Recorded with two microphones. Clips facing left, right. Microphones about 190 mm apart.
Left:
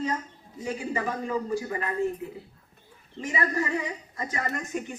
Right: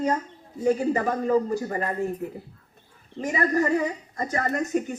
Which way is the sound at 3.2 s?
40° right (ahead or behind).